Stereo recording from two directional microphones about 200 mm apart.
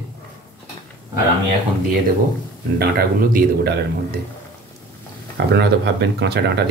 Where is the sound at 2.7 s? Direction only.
50° right (ahead or behind).